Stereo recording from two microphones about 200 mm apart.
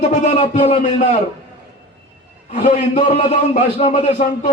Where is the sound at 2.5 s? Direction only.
35° left (ahead or behind).